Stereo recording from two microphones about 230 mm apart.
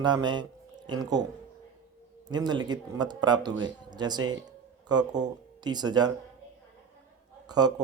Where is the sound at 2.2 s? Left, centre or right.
Centre.